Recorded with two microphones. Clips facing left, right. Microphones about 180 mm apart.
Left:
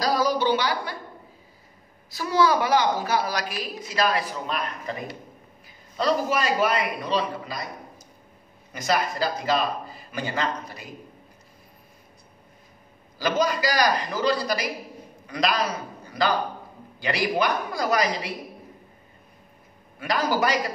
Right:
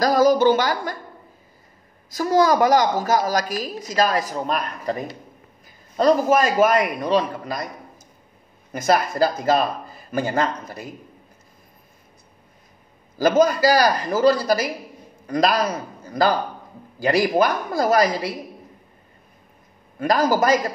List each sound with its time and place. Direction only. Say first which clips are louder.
0.0 s a woman's voice: right 7 dB; 45° right (ahead or behind)
2.0 s a woman's voice: right 4 dB; 45° right (ahead or behind)
8.7 s a woman's voice: right 6 dB; 50° right (ahead or behind)
13.2 s a woman's voice: right 7 dB; 50° right (ahead or behind)
20.0 s a woman's voice: right 5 dB; 45° right (ahead or behind)